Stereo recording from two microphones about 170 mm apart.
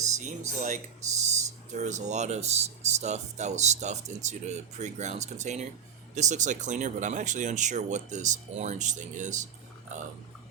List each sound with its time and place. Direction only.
0.2 s speech: 45° right (ahead or behind)